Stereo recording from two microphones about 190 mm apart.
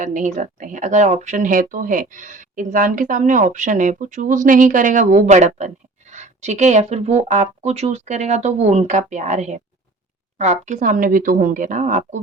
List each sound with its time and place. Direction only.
0.0 s a woman's voice: 40° right (ahead or behind)